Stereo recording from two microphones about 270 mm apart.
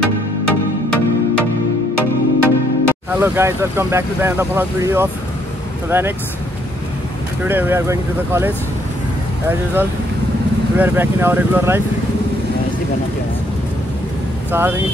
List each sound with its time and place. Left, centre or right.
0.0 s music: left
3.1 s speech: centre
7.4 s speech: centre
10.8 s speech: centre
14.5 s speech: centre